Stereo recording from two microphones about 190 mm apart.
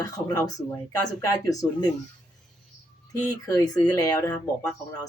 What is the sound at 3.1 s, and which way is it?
Speech, 20° left (ahead or behind).